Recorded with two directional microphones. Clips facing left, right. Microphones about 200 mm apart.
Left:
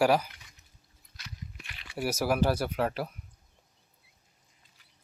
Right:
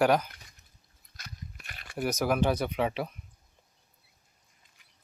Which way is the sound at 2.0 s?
5° left (ahead or behind).